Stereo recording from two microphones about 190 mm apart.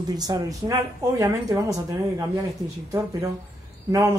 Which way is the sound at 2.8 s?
20° right (ahead or behind).